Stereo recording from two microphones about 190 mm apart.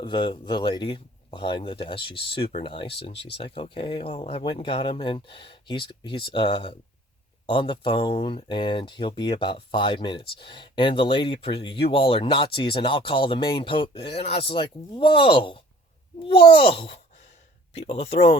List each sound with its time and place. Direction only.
0.0 s speech: 25° left (ahead or behind)